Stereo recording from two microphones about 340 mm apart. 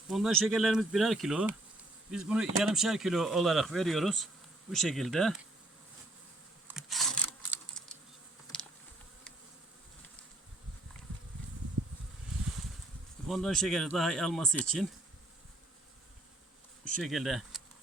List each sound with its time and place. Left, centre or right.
0.1 s speech: centre
6.7 s a sound: centre
13.2 s speech: centre
17.0 s speech: centre